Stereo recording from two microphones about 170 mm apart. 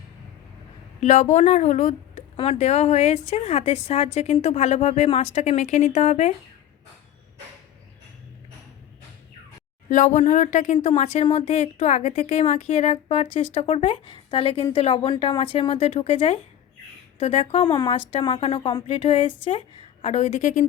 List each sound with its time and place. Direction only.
1.0 s speech: 45° left (ahead or behind)
9.9 s speech: 50° left (ahead or behind); by 18.4 s 25° left (ahead or behind)
18.4 s speech: 40° left (ahead or behind)